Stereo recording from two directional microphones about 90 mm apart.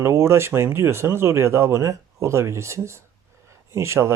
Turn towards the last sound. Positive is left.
turn(degrees=-30)  # may be behind; listen again after turning